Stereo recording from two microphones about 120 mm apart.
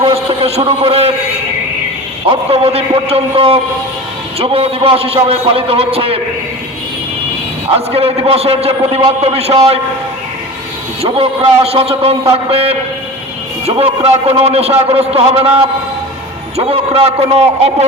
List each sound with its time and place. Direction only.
0.0 s a sound: 55° right (ahead or behind)
2.3 s a man's voice: 55° right (ahead or behind)
7.9 s a man's voice: 55° right (ahead or behind)
11.0 s a man's voice: 55° right (ahead or behind)
16.6 s a man's voice: 55° right (ahead or behind)